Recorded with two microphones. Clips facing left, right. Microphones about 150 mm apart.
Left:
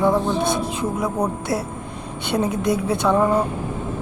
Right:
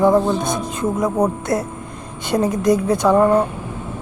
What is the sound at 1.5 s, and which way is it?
Music, 5° left (ahead or behind).